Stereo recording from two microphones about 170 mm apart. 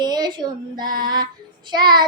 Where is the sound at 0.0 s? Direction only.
25° right (ahead or behind).